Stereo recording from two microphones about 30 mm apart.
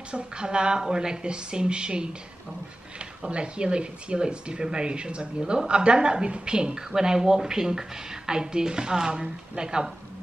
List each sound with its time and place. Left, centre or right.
0.1 s speech: right
3.3 s a woman's voice: right